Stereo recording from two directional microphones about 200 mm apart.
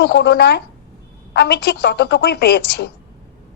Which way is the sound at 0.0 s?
55° left (ahead or behind).